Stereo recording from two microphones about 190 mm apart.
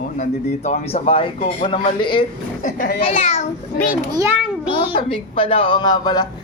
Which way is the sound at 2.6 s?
50° left (ahead or behind).